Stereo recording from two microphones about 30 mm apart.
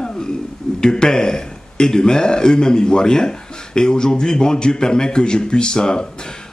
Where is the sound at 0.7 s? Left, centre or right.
Left.